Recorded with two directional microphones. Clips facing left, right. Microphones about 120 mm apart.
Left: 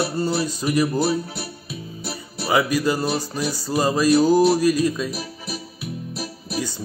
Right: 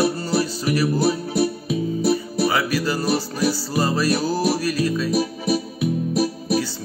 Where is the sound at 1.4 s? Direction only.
45° right (ahead or behind).